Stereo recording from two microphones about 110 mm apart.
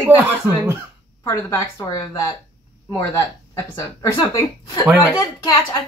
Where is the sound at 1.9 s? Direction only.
35° left (ahead or behind).